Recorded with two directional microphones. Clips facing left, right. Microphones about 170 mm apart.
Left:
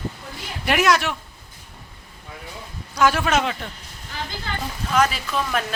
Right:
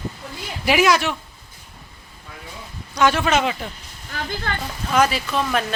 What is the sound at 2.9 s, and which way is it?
Speech, 5° left (ahead or behind).